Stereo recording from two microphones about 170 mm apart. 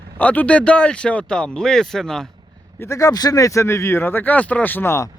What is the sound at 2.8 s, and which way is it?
Speech, 20° left (ahead or behind).